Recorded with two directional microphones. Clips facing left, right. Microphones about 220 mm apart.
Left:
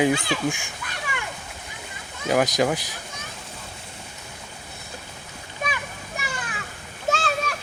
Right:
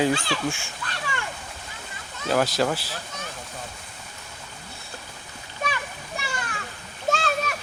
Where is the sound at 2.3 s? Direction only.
15° left (ahead or behind).